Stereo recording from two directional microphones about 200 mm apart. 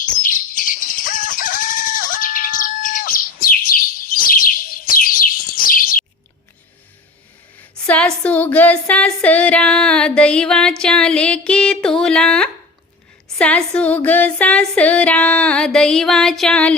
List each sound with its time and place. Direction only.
0.2 s chicken: 45° left (ahead or behind)
7.9 s speech: 5° left (ahead or behind)
13.4 s female singing: 5° left (ahead or behind)